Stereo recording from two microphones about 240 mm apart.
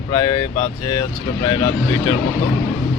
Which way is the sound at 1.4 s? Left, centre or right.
Centre.